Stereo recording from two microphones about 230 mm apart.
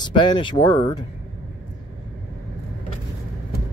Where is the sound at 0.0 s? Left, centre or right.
Centre.